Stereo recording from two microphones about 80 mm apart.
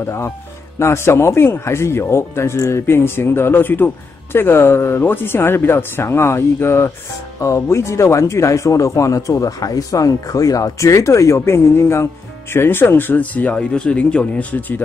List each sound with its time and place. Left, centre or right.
0.0 s speech: left